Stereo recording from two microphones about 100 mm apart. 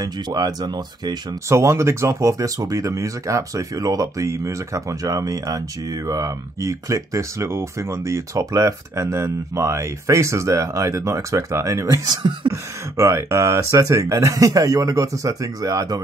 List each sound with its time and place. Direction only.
0.0 s speech: 40° right (ahead or behind)
1.5 s speech: 30° right (ahead or behind)